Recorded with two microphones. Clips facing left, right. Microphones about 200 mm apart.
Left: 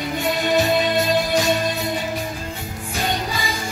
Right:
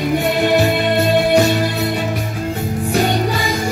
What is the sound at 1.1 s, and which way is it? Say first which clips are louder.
Music: right 6 dB; 65° right (ahead or behind).